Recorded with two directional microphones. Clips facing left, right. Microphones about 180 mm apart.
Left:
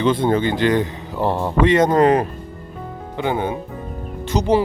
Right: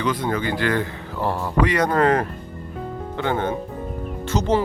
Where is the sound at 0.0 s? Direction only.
25° left (ahead or behind).